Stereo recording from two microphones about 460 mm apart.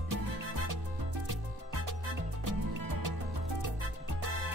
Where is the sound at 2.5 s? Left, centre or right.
Right.